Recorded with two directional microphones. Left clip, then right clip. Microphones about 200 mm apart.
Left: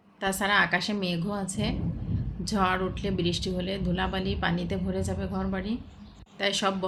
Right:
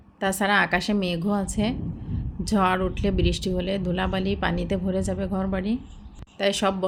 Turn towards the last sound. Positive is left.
turn(degrees=-30)  # may be behind; listen again after turning